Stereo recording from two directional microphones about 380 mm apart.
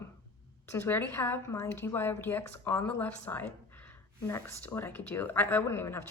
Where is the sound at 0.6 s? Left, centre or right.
Centre.